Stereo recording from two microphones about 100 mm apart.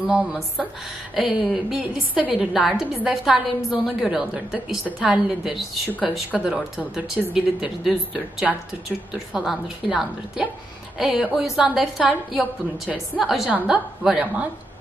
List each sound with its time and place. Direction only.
0.0 s a woman's voice: 5° right (ahead or behind)
13.5 s speech: 15° right (ahead or behind)